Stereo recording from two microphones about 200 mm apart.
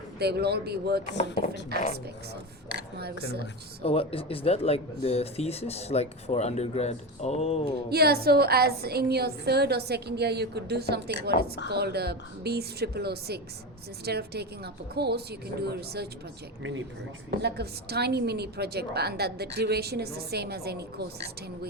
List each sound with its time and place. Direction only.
0.2 s a woman's voice: 55° right (ahead or behind)
1.0 s speech: 35° left (ahead or behind)
3.8 s speech: 30° left (ahead or behind)
7.9 s a woman's voice: 50° right (ahead or behind)
17.4 s a woman's voice: 55° right (ahead or behind)